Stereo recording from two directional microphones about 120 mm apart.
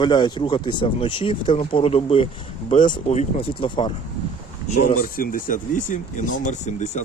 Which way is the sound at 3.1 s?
65° left (ahead or behind).